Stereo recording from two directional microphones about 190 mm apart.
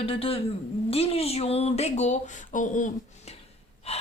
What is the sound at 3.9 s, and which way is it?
Gasp, 30° left (ahead or behind).